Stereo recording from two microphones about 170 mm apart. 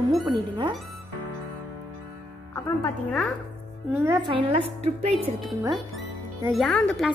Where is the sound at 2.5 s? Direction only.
15° left (ahead or behind).